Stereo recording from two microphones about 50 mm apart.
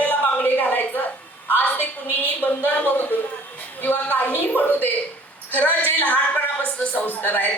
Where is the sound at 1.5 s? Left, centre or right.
Left.